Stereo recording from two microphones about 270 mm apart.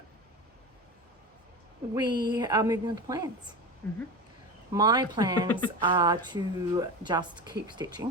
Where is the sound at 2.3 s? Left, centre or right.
Centre.